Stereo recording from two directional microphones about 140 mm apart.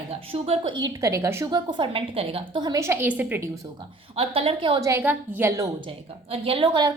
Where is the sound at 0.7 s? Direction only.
25° right (ahead or behind).